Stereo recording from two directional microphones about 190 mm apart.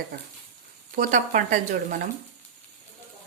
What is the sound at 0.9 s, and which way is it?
Speech, 40° right (ahead or behind).